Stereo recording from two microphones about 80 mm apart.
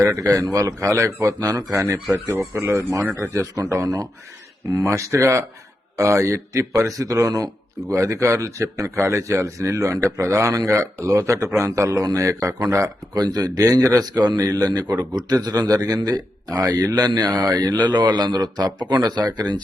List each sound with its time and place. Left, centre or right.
0.0 s a man's voice: right
2.6 s a man's voice: right
13.1 s a man's voice: right